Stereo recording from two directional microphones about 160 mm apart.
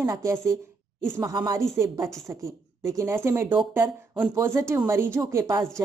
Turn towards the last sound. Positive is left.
turn(degrees=-20)  # may be behind; listen again after turning